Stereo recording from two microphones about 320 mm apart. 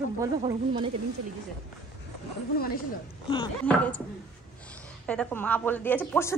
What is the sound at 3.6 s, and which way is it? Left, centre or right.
Speech, centre.